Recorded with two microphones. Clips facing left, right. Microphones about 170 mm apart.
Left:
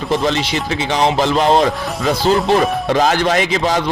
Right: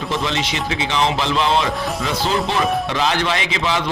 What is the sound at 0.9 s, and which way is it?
Speech, 45° left (ahead or behind).